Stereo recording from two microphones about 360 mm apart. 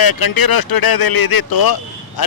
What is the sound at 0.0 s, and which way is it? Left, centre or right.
Speech, left.